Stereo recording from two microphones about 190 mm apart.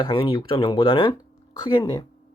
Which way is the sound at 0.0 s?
25° left (ahead or behind).